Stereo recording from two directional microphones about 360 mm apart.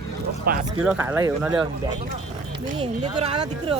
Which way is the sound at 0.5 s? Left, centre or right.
Right.